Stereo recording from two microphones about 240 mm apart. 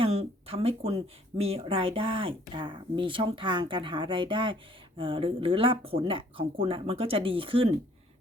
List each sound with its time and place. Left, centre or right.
0.0 s speech: right